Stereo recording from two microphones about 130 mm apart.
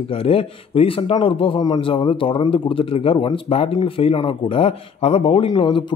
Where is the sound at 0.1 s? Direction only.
45° left (ahead or behind).